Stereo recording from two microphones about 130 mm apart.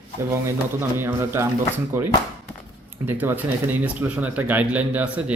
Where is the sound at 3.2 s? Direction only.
15° right (ahead or behind).